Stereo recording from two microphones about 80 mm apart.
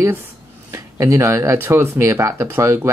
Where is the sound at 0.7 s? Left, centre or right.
Right.